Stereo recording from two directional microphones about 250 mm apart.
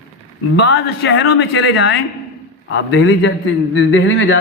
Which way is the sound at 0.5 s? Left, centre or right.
Left.